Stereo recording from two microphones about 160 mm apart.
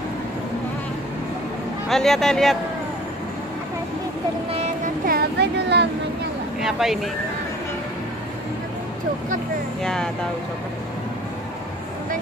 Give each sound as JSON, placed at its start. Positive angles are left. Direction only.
{"t": 1.9, "sound": "speech", "side_deg": 0}
{"t": 4.8, "sound": "a sound", "side_deg": -65}
{"t": 6.6, "sound": "speech", "side_deg": 0}